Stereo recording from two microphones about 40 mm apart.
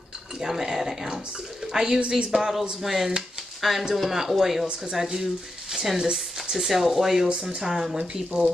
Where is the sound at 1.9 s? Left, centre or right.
Right.